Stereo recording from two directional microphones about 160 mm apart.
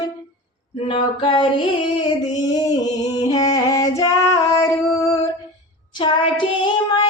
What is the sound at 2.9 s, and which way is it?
Female singing, 25° left (ahead or behind).